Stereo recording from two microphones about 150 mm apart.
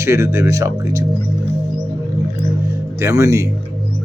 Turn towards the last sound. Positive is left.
turn(degrees=-20)  # may be behind; listen again after turning